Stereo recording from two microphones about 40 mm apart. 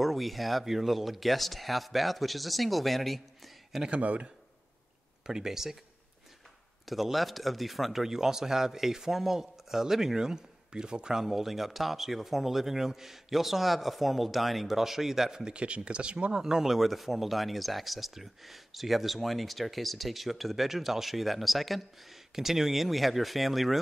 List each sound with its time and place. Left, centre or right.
0.0 s speech: centre
4.0 s a man's voice: right
5.2 s speech: centre
6.9 s speech: centre
11.1 s speech: centre
15.4 s speech: right
16.3 s speech: centre